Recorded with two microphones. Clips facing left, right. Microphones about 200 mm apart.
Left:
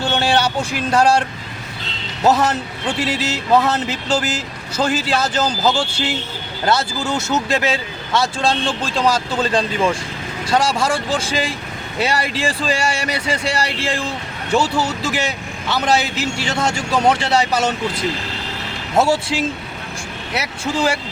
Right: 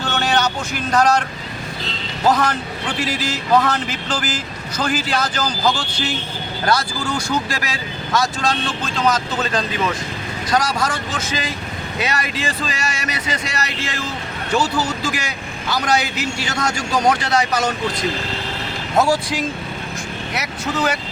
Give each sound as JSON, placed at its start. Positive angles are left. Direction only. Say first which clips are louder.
{"t": 0.0, "sound": "a sound", "louder": "left 2 dB", "side_deg": 30}
{"t": 2.2, "sound": "speech", "louder": "left 2 dB", "side_deg": 25}
{"t": 18.9, "sound": "speech", "louder": "left 1 dB", "side_deg": 25}